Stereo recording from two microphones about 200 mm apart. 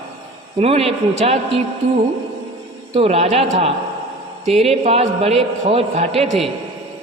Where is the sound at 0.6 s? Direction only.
30° right (ahead or behind).